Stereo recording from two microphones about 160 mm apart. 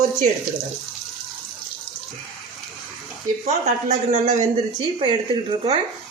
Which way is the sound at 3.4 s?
45° right (ahead or behind).